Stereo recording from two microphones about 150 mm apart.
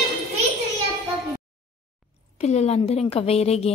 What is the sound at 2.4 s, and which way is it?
Speech, 45° left (ahead or behind).